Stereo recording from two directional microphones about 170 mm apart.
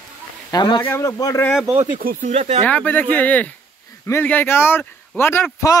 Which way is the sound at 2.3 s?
40° right (ahead or behind).